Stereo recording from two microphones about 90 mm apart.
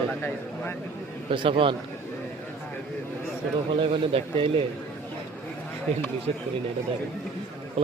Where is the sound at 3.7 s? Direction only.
75° right (ahead or behind).